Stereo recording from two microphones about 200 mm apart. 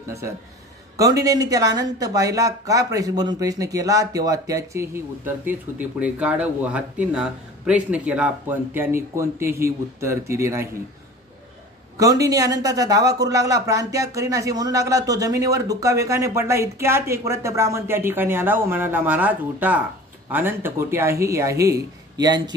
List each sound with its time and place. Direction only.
0.9 s speech: 15° right (ahead or behind)
12.0 s speech: 15° right (ahead or behind)